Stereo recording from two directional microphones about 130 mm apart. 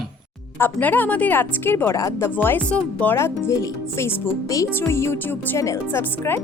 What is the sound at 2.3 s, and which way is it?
Speech, 15° left (ahead or behind).